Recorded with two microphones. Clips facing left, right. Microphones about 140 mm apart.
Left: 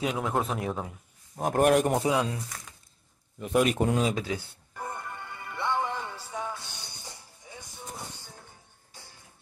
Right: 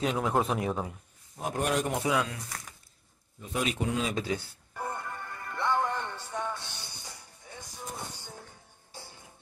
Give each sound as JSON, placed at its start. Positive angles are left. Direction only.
{"t": 0.0, "sound": "a man's voice", "side_deg": 0}
{"t": 1.3, "sound": "a man's voice", "side_deg": 50}
{"t": 2.0, "sound": "speech", "side_deg": 30}
{"t": 3.3, "sound": "a man's voice", "side_deg": 60}
{"t": 3.7, "sound": "a man's voice", "side_deg": 45}
{"t": 4.1, "sound": "music", "side_deg": 0}